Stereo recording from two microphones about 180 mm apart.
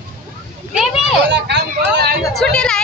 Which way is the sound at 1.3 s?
70° right (ahead or behind).